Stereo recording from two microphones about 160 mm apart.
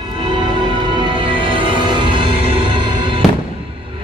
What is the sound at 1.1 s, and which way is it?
Music, 30° right (ahead or behind).